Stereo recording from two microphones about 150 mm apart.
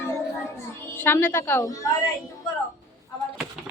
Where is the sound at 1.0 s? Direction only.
15° left (ahead or behind).